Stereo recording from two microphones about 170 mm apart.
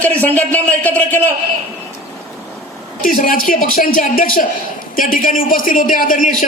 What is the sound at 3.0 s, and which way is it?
A woman's voice, 55° left (ahead or behind).